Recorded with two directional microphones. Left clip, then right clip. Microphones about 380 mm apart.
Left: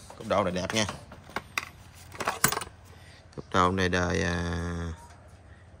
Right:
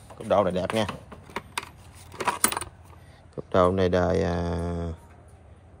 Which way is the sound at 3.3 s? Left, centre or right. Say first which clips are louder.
Right 3 dB; centre.